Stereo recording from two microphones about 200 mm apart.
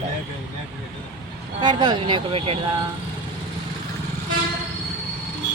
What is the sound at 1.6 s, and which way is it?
Speech, 20° right (ahead or behind).